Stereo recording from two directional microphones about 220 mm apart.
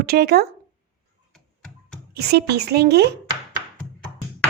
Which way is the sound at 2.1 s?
45° right (ahead or behind).